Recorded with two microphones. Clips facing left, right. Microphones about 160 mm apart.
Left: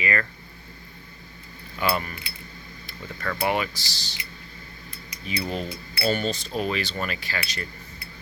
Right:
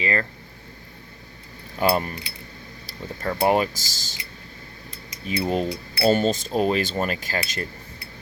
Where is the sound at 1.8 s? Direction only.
40° right (ahead or behind).